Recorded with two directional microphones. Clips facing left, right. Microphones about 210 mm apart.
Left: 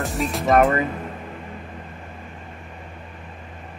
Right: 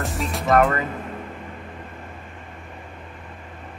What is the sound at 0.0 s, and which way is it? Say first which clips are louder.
Speech: left 2 dB; centre (ahead or behind).